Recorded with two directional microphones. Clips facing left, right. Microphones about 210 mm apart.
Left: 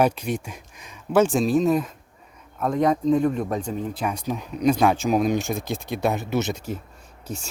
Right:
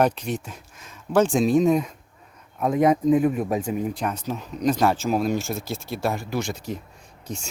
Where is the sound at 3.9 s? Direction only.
5° left (ahead or behind).